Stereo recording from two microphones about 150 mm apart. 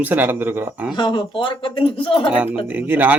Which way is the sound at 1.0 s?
30° left (ahead or behind).